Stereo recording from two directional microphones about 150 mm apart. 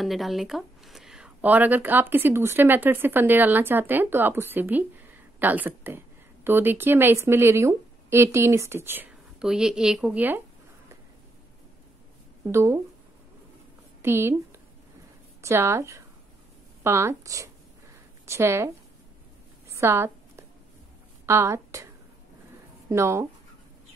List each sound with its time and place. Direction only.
0.0 s speech: centre (ahead or behind)
12.4 s speech: 20° right (ahead or behind)
14.0 s speech: 15° right (ahead or behind)
19.7 s a sound: 20° right (ahead or behind)
21.3 s a woman's voice: 20° right (ahead or behind)
22.8 s speech: 20° right (ahead or behind)